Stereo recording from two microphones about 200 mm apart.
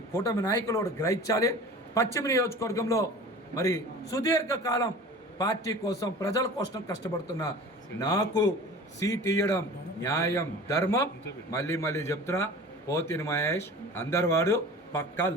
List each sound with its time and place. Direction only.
0.1 s a man's voice: 15° left (ahead or behind)